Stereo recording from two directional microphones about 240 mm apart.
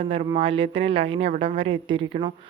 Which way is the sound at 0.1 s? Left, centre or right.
Right.